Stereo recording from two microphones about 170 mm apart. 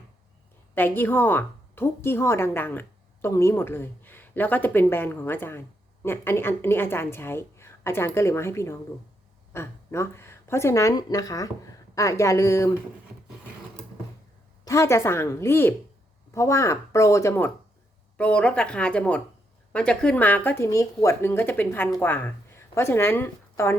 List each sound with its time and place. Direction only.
0.8 s a woman's voice: 10° left (ahead or behind)
14.6 s a woman's voice: 15° left (ahead or behind)